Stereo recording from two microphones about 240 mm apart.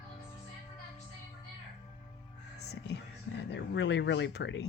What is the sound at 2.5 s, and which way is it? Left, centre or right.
Speech, left.